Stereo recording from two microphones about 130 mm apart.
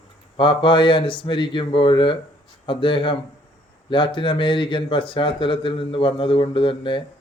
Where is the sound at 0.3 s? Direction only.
40° left (ahead or behind).